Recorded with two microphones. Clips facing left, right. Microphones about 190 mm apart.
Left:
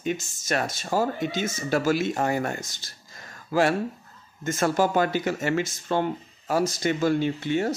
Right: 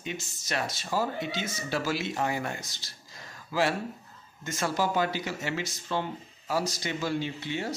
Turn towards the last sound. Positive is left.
turn(degrees=50)  # may be behind; listen again after turning